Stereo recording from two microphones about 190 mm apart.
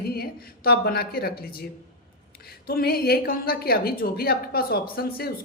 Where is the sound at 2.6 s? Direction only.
50° left (ahead or behind).